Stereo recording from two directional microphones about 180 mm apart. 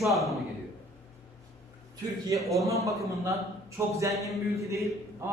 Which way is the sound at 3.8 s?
15° right (ahead or behind).